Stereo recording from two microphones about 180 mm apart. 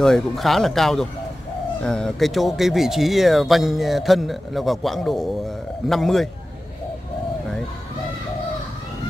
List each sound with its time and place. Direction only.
0.0 s speech: centre (ahead or behind)